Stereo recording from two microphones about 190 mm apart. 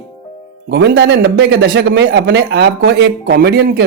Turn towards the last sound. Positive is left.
turn(degrees=-60)  # may be behind; listen again after turning